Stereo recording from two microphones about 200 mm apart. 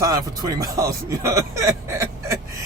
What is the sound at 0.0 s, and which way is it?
Speech, 20° right (ahead or behind).